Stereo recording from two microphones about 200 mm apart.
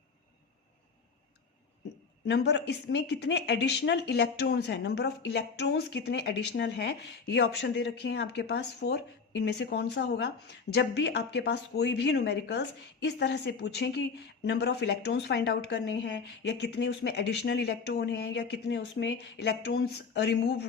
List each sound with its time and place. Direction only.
2.2 s speech: 60° left (ahead or behind)